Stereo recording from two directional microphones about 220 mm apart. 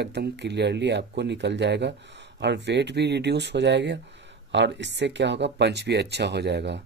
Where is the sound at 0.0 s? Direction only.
50° right (ahead or behind).